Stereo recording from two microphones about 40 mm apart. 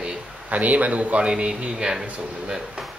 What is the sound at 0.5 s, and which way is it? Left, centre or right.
Speech, right.